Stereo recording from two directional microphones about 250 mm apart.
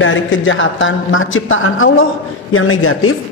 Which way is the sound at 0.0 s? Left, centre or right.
Left.